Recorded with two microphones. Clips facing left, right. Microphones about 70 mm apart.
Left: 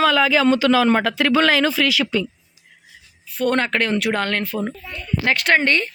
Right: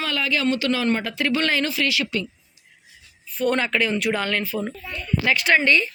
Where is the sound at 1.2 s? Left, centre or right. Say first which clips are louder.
Left 4 dB; left.